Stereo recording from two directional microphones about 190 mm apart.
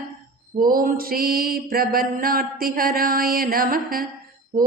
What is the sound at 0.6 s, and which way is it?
Mantra, 50° right (ahead or behind).